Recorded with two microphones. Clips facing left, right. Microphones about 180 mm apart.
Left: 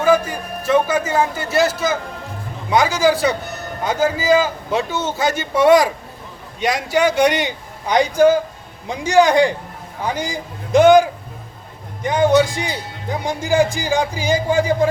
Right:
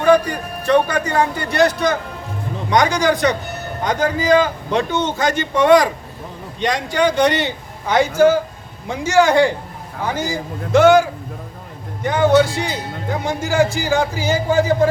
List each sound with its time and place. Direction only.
0.0 s a man's voice: 5° left (ahead or behind)
12.0 s a man's voice: 15° left (ahead or behind)